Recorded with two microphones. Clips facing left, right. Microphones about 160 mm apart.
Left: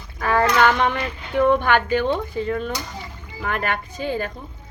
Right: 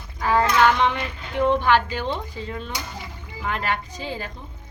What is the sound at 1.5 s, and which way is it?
Speech, 55° left (ahead or behind).